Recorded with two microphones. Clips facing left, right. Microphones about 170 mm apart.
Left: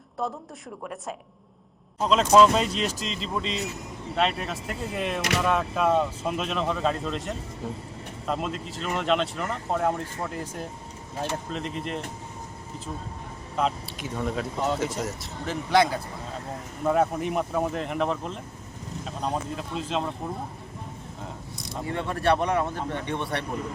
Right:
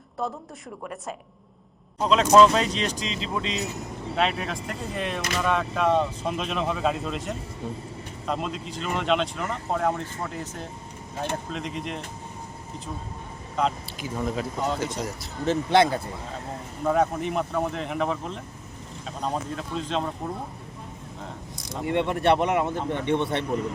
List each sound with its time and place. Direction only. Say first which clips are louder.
0.2 s speech: even; centre (ahead or behind)
2.0 s speech: right 1 dB; centre (ahead or behind)
11.5 s speech: left 1 dB; centre (ahead or behind)
13.6 s speech: right 1 dB; centre (ahead or behind)
15.4 s speech: right 2 dB; 25° right (ahead or behind)
16.8 s speech: even; 5° left (ahead or behind)
21.8 s speech: right 3 dB; 20° right (ahead or behind)